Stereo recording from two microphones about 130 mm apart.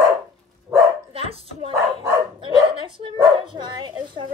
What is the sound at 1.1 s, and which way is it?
Dog, 45° right (ahead or behind).